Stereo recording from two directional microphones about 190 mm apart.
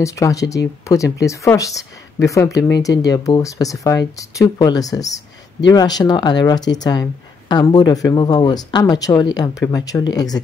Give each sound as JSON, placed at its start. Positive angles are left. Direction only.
{"t": 0.0, "sound": "speech", "side_deg": 15}